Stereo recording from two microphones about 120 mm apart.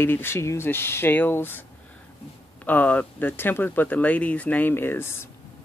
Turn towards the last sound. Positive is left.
turn(degrees=20)  # may be behind; listen again after turning